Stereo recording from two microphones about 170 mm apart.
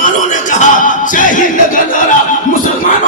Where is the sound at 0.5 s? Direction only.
50° left (ahead or behind).